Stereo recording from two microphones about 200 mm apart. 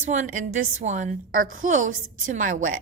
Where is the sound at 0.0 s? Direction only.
40° right (ahead or behind).